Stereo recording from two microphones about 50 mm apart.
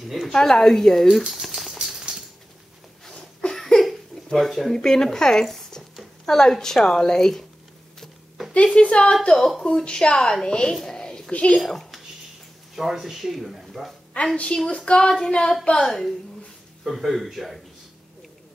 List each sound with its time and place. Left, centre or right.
0.0 s speech: centre
0.3 s a woman's voice: centre
1.2 s patter: centre
3.1 s a sound: centre
6.2 s a woman's voice: centre
8.7 s a woman's voice: left
9.3 s a woman's voice: centre
10.8 s a sound: centre
11.3 s a woman's voice: left
11.6 s speech: centre
12.7 s speech: centre
14.3 s a woman's voice: left
15.8 s speech: centre